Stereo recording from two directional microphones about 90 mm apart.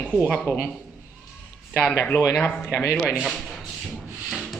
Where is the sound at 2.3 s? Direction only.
10° left (ahead or behind).